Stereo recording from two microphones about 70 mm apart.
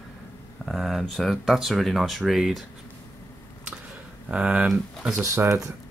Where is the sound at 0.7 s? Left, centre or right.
Centre.